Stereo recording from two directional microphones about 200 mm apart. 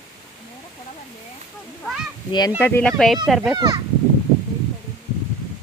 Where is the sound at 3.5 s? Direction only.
20° right (ahead or behind).